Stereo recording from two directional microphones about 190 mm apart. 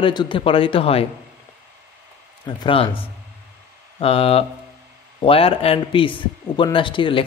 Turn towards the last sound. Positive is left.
turn(degrees=25)  # may be behind; listen again after turning